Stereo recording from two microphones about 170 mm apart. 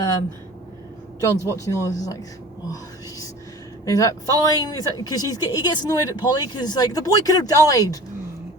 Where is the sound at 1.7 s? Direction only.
25° left (ahead or behind).